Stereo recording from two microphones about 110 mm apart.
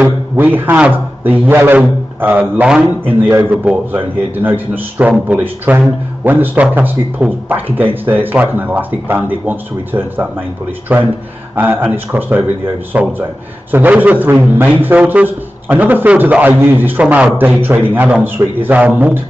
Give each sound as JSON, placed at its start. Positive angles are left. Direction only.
{"t": 0.0, "sound": "a man's voice", "side_deg": -15}